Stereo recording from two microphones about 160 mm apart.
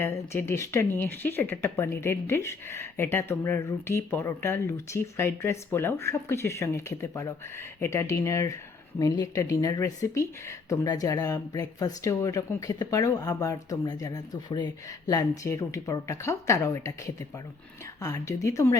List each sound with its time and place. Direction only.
0.0 s speech: 15° left (ahead or behind)
18.0 s speech: 20° left (ahead or behind)